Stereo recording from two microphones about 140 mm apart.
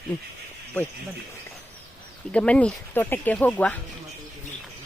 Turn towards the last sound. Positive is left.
turn(degrees=10)  # may be behind; listen again after turning